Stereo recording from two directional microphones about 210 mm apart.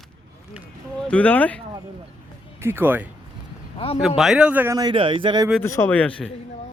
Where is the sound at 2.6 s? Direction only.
10° right (ahead or behind).